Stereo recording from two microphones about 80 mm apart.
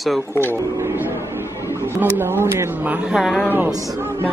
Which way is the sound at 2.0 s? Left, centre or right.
Right.